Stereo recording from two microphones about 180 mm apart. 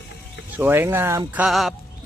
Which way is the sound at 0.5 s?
10° right (ahead or behind).